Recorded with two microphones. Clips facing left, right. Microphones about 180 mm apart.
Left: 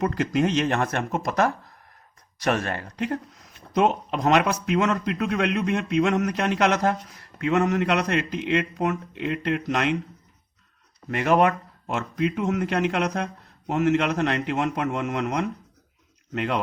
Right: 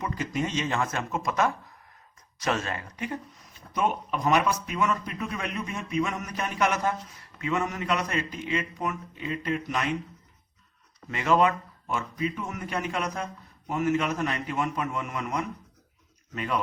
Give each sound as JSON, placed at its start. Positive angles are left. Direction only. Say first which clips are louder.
{"t": 0.0, "sound": "speech", "louder": "left 7 dB", "side_deg": 70}
{"t": 2.4, "sound": "speech", "louder": "left 4 dB", "side_deg": 60}
{"t": 3.8, "sound": "speech", "louder": "left 6 dB", "side_deg": 75}
{"t": 11.1, "sound": "speech", "louder": "left 3 dB", "side_deg": 60}